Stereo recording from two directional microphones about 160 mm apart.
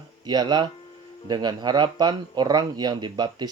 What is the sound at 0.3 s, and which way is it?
Speech, 25° right (ahead or behind).